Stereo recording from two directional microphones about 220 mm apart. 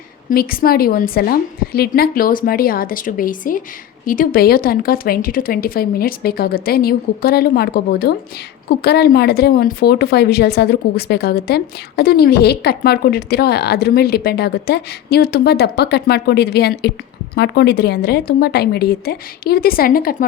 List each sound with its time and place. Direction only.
0.3 s a woman's voice: 40° left (ahead or behind)